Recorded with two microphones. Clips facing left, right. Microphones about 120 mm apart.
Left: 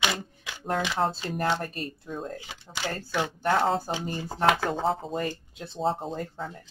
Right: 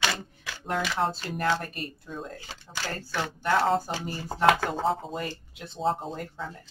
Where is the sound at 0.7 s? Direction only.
20° left (ahead or behind).